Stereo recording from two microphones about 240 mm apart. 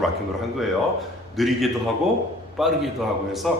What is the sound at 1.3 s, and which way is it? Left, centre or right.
Mantra, centre.